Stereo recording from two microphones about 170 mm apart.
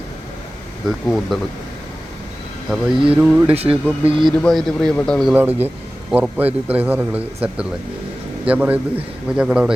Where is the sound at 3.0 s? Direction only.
5° right (ahead or behind).